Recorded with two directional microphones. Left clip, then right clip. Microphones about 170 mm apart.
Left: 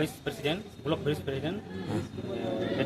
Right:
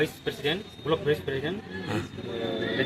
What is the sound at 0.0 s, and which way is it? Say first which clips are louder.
Speech: right 4 dB; 30° left (ahead or behind).